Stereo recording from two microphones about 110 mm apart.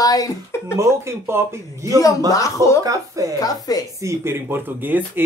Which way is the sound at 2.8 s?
30° right (ahead or behind).